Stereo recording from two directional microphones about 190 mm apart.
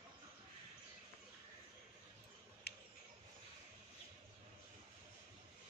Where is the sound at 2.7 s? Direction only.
55° left (ahead or behind).